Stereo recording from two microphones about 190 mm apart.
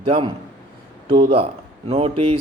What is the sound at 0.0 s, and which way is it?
A man's voice, 25° right (ahead or behind).